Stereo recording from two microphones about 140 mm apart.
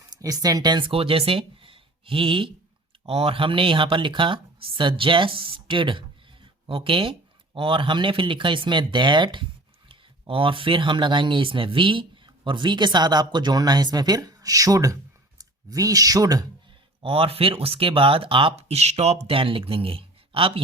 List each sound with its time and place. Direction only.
0.1 s speech: 25° right (ahead or behind)
17.0 s speech: 40° right (ahead or behind)